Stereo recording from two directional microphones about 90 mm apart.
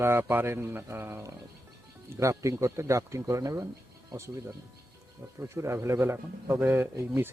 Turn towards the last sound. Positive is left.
turn(degrees=-30)  # may be behind; listen again after turning